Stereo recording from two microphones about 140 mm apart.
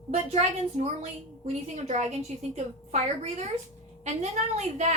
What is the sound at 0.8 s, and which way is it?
Speech, 60° right (ahead or behind).